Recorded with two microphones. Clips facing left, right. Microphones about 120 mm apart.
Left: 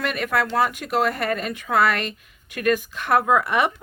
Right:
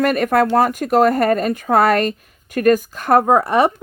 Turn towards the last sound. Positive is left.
turn(degrees=-35)  # may be behind; listen again after turning